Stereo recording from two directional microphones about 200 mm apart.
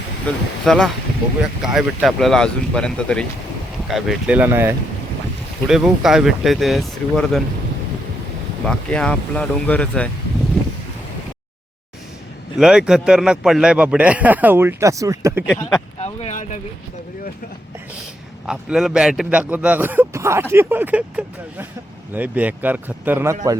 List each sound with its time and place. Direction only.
0.3 s speech: 5° left (ahead or behind)
8.6 s speech: 5° left (ahead or behind)
12.5 s a man's voice: 5° right (ahead or behind)
16.0 s speech: 30° left (ahead or behind)
18.4 s a man's voice: 5° right (ahead or behind)